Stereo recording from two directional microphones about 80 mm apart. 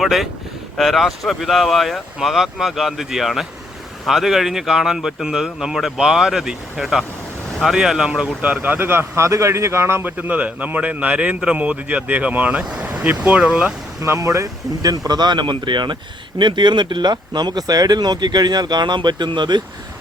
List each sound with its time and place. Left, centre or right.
0.0 s speech: centre
8.6 s speech: right
14.0 s speech: right